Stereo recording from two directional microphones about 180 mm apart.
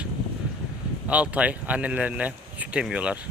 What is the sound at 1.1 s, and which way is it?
Speech, 5° right (ahead or behind).